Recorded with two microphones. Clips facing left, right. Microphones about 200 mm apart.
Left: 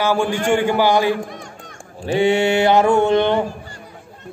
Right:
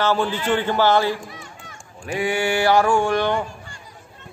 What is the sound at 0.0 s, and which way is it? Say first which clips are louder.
A man's voice: left 3 dB; 10° left (ahead or behind).